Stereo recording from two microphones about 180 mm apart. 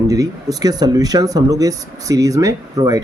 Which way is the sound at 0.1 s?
20° right (ahead or behind).